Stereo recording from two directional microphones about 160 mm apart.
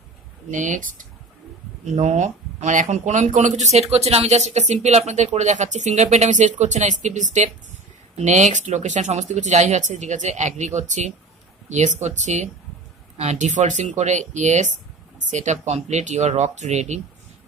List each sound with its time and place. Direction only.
0.5 s speech: 50° right (ahead or behind)